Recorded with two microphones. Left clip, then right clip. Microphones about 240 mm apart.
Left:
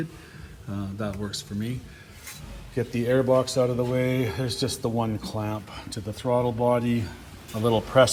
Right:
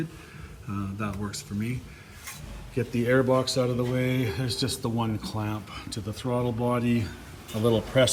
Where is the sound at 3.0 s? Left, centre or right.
Centre.